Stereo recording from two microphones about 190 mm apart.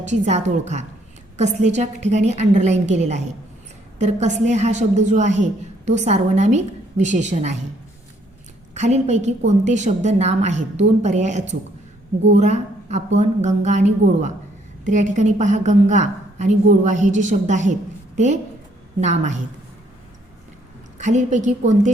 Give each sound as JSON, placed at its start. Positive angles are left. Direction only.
{"t": 0.0, "sound": "a woman's voice", "side_deg": -40}
{"t": 8.7, "sound": "a woman's voice", "side_deg": -35}
{"t": 18.9, "sound": "a woman's voice", "side_deg": -40}
{"t": 21.0, "sound": "a woman's voice", "side_deg": -40}